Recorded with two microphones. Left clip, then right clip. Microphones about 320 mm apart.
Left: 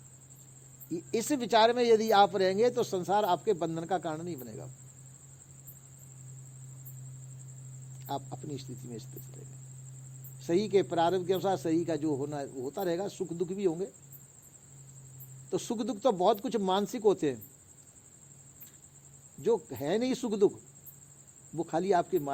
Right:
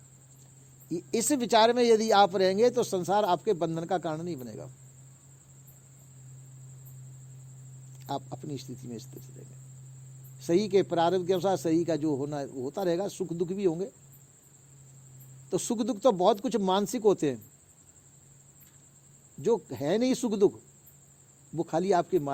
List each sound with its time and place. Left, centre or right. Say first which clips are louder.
0.9 s a man's voice: right 3 dB; right
7.9 s a man's voice: right 2 dB; right
10.3 s a man's voice: right 2 dB; right
15.4 s a man's voice: right 3 dB; right
19.4 s a man's voice: right 2 dB; right
21.5 s a man's voice: right 2 dB; right